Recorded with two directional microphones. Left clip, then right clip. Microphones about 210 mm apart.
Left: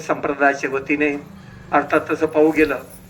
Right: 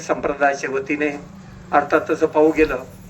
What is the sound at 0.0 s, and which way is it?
A man's voice, 35° left (ahead or behind).